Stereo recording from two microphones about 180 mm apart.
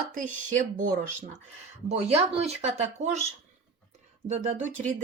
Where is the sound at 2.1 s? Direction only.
35° right (ahead or behind).